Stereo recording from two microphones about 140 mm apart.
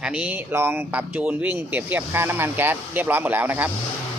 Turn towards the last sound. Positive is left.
turn(degrees=-10)  # may be behind; listen again after turning